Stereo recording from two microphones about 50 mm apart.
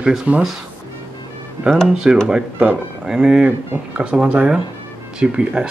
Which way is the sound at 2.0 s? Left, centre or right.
Right.